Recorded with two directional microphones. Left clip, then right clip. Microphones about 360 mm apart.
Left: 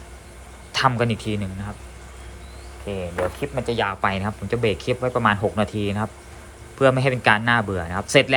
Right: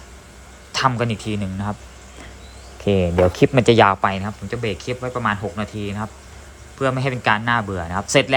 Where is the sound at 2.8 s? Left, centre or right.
Right.